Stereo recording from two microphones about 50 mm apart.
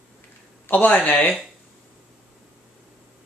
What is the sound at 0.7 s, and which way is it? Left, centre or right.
Speech, left.